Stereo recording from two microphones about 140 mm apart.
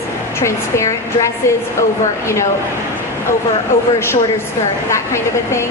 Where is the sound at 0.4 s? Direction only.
20° left (ahead or behind).